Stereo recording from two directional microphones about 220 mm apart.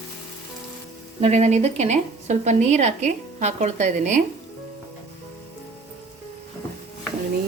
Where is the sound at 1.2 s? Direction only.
30° right (ahead or behind).